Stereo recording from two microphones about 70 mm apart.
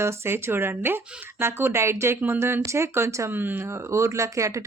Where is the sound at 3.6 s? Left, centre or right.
Right.